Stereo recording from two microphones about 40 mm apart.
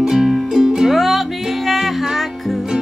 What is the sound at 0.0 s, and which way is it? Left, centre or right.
Music, centre.